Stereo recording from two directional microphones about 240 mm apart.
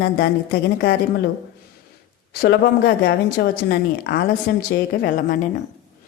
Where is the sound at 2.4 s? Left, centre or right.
Left.